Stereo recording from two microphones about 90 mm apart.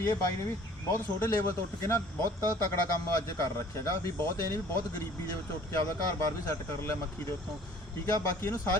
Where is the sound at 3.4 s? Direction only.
35° left (ahead or behind).